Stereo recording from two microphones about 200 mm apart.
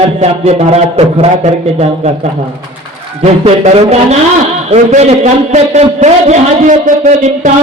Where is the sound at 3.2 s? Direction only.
30° right (ahead or behind).